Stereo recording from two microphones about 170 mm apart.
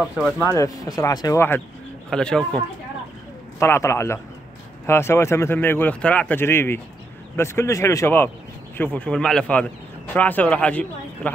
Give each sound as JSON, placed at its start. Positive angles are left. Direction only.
{"t": 0.6, "sound": "speech", "side_deg": 20}
{"t": 2.0, "sound": "speech", "side_deg": 5}
{"t": 3.5, "sound": "speech", "side_deg": 15}